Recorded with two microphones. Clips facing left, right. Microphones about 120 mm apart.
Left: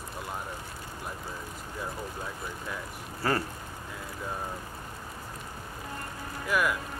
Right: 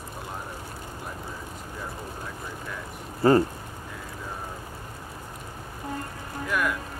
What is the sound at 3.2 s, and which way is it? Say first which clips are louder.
Speech: right 10 dB; 20° right (ahead or behind).